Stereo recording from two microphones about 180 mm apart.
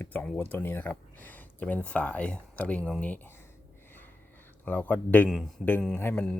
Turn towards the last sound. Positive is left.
turn(degrees=5)  # may be behind; listen again after turning